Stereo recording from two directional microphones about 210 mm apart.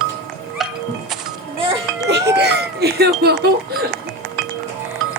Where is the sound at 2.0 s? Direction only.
55° right (ahead or behind).